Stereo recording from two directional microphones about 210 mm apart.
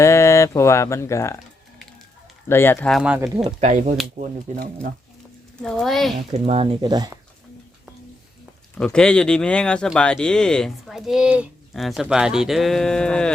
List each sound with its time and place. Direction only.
0.0 s speech: 15° left (ahead or behind)
2.5 s speech: 10° left (ahead or behind)
3.0 s speech: 5° right (ahead or behind)
3.2 s speech: 15° right (ahead or behind)
3.6 s speech: 35° right (ahead or behind)
5.6 s speech: centre (ahead or behind)
6.3 s speech: 30° right (ahead or behind)
8.8 s speech: 5° left (ahead or behind)